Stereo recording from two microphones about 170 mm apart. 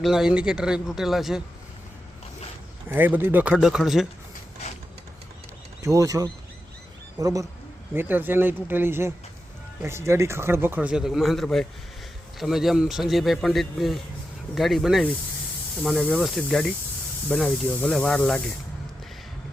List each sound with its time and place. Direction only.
0.0 s speech: 5° right (ahead or behind)
2.9 s speech: 10° right (ahead or behind)
5.8 s speech: 20° right (ahead or behind); by 18.4 s 5° left (ahead or behind)